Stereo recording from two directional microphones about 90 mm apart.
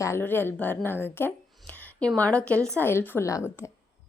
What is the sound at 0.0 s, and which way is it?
A woman's voice, 25° left (ahead or behind).